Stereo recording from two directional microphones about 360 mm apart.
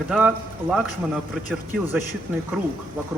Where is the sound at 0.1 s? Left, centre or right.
Centre.